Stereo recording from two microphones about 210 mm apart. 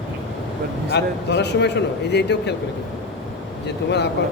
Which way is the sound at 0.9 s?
55° left (ahead or behind).